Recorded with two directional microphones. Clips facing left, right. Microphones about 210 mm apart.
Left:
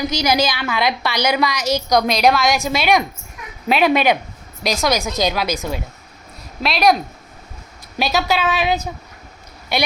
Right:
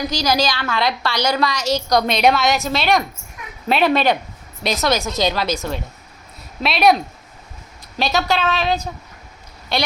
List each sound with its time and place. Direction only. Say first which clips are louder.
0.1 s a woman's voice: left 1 dB; 20° left (ahead or behind)
2.0 s a woman's voice: left 1 dB; 5° right (ahead or behind)
2.3 s a woman's voice: left 1 dB; 10° left (ahead or behind)
6.6 s a woman's voice: right 1 dB; centre (ahead or behind)